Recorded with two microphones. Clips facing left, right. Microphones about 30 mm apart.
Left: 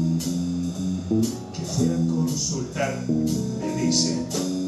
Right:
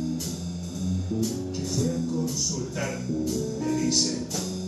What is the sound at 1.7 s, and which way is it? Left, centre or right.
Music, centre.